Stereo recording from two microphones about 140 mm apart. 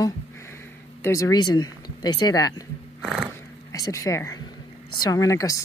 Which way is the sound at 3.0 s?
5° right (ahead or behind).